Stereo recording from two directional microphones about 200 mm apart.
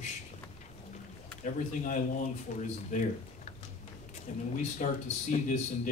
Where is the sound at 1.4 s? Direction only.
40° left (ahead or behind).